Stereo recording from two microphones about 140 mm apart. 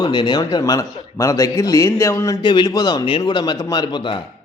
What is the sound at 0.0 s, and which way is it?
A man's voice, 30° left (ahead or behind).